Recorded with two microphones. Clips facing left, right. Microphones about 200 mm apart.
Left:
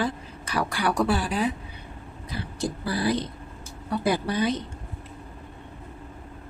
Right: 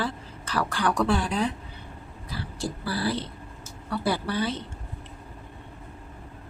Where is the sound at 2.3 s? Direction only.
20° left (ahead or behind).